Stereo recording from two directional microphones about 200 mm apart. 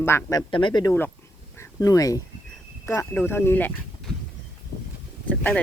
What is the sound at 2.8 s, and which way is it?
Speech, 10° left (ahead or behind).